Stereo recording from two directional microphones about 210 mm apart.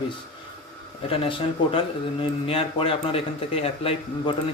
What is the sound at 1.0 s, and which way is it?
Speech, 25° left (ahead or behind).